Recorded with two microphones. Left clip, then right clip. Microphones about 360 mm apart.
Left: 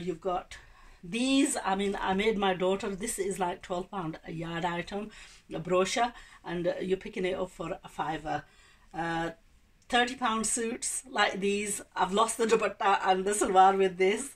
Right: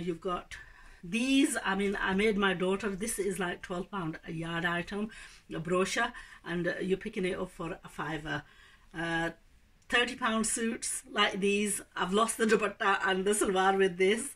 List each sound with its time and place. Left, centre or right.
1.1 s speech: centre